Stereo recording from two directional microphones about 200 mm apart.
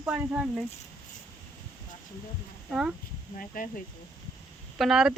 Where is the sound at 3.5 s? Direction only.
45° left (ahead or behind).